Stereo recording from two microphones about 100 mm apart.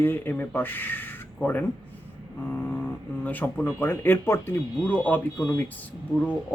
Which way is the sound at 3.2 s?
15° left (ahead or behind).